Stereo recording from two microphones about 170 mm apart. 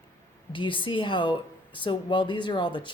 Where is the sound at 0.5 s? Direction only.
30° left (ahead or behind).